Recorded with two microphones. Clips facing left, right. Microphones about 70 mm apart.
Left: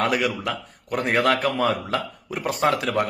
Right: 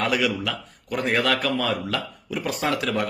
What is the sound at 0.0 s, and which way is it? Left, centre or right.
A man's voice, left.